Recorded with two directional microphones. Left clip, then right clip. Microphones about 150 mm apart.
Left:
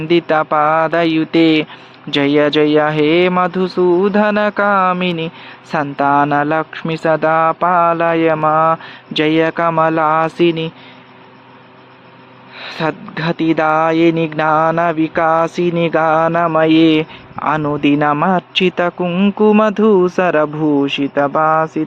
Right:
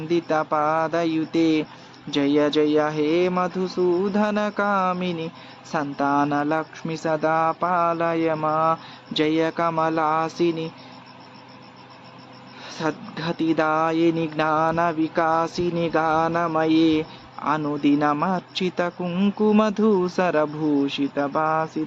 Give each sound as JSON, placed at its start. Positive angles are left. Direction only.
{"t": 0.1, "sound": "speech", "side_deg": 55}
{"t": 12.5, "sound": "speech", "side_deg": 50}
{"t": 16.2, "sound": "speech", "side_deg": 60}
{"t": 18.6, "sound": "speech", "side_deg": 50}
{"t": 19.0, "sound": "speech", "side_deg": 35}